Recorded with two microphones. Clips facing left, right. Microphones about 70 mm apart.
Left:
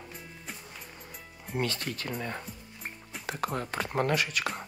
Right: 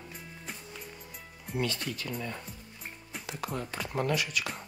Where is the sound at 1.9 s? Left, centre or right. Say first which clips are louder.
Left 1 dB; left.